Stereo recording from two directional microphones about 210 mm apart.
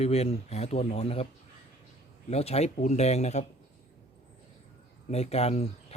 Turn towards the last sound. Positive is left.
turn(degrees=30)  # may be behind; listen again after turning